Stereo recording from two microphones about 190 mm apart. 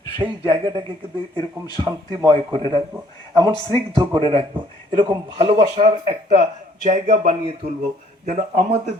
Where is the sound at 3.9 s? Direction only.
30° right (ahead or behind).